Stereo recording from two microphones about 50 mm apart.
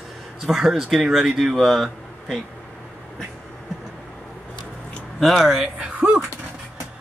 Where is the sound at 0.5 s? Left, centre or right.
Centre.